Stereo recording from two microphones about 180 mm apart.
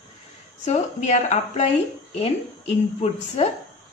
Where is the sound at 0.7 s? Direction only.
40° left (ahead or behind).